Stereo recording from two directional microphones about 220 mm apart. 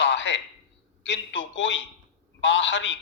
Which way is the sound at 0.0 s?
55° left (ahead or behind).